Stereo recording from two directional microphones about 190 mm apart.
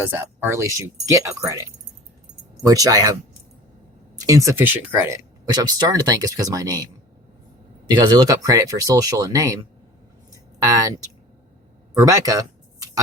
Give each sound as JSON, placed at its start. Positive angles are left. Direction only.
{"t": 0.1, "sound": "speech", "side_deg": -10}
{"t": 2.6, "sound": "speech", "side_deg": -20}
{"t": 4.3, "sound": "speech", "side_deg": -15}
{"t": 7.9, "sound": "speech", "side_deg": -20}
{"t": 10.3, "sound": "a sound", "side_deg": -20}
{"t": 11.9, "sound": "a sound", "side_deg": -15}